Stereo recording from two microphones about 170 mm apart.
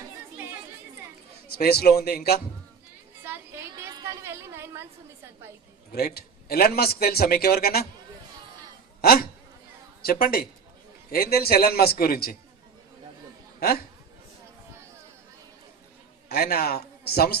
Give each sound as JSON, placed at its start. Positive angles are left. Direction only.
{"t": 1.5, "sound": "a man's voice", "side_deg": 65}
{"t": 3.5, "sound": "a sound", "side_deg": -15}
{"t": 5.9, "sound": "a man's voice", "side_deg": 65}
{"t": 9.0, "sound": "insect", "side_deg": 60}
{"t": 10.0, "sound": "a man's voice", "side_deg": 60}
{"t": 13.6, "sound": "a man's voice", "side_deg": 65}
{"t": 16.3, "sound": "a man's voice", "side_deg": 65}